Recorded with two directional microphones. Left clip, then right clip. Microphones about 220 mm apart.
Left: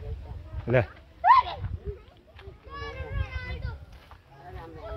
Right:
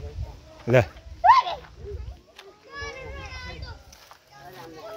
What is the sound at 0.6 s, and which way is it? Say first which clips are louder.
Speech: right 5 dB; 20° right (ahead or behind).